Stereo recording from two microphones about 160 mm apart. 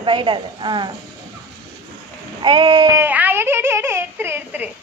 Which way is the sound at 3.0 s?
10° right (ahead or behind).